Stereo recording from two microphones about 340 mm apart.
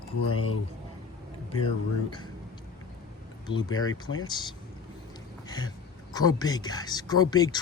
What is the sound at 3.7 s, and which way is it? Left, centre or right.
Speech, left.